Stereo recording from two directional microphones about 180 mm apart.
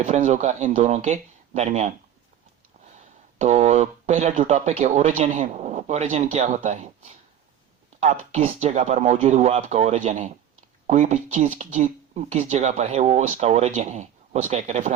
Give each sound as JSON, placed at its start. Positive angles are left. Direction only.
{"t": 0.0, "sound": "speech", "side_deg": -40}
{"t": 3.3, "sound": "speech", "side_deg": -40}